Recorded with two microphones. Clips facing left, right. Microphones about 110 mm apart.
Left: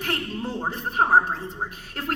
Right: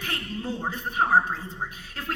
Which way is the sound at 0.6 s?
35° left (ahead or behind).